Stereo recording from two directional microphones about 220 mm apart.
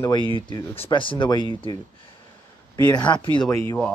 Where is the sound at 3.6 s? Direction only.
5° left (ahead or behind).